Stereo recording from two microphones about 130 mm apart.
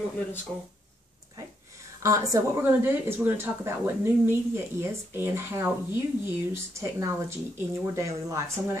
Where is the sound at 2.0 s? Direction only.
25° right (ahead or behind).